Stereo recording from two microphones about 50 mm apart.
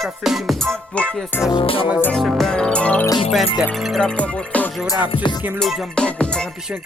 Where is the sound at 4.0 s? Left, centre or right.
Left.